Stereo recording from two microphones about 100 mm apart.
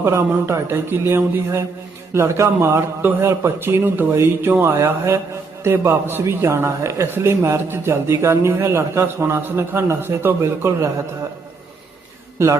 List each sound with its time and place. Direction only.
0.0 s a man's voice: 25° right (ahead or behind)